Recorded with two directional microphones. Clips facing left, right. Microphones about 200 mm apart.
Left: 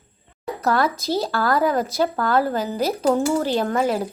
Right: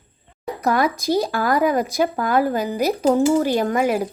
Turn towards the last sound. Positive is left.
turn(degrees=-10)  # may be behind; listen again after turning